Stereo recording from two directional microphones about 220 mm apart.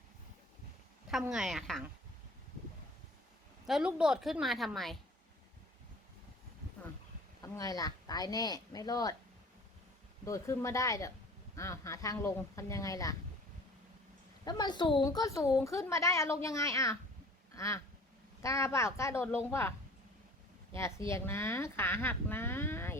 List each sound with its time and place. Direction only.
1.2 s a woman's voice: centre (ahead or behind)
3.7 s a woman's voice: 5° right (ahead or behind)
7.4 s a woman's voice: 15° left (ahead or behind)
10.2 s a woman's voice: 15° left (ahead or behind)
14.4 s a woman's voice: 20° left (ahead or behind)
17.5 s quack: 15° left (ahead or behind)
18.4 s a woman's voice: 15° left (ahead or behind)
21.1 s a woman's voice: 10° left (ahead or behind)